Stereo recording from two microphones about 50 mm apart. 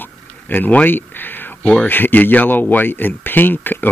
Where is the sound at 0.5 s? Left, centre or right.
Left.